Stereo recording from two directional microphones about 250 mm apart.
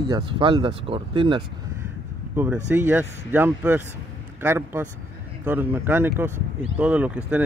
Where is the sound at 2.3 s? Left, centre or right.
Centre.